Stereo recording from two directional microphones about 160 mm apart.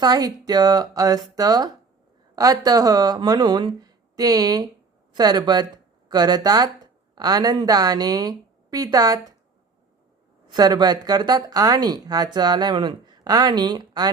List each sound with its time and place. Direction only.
0.0 s speech: 25° right (ahead or behind)
10.5 s speech: 25° right (ahead or behind)